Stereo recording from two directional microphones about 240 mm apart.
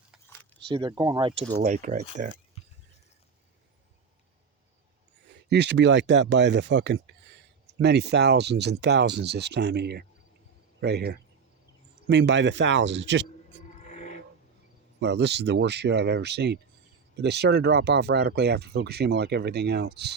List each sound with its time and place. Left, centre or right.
0.7 s speech: centre
1.6 s speech: right
5.5 s speech: right
13.8 s a sound: left
15.0 s speech: right